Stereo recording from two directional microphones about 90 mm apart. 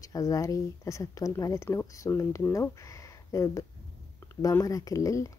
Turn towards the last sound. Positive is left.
turn(degrees=35)  # may be behind; listen again after turning